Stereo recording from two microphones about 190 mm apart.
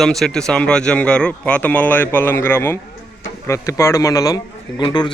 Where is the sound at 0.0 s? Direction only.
Centre (ahead or behind).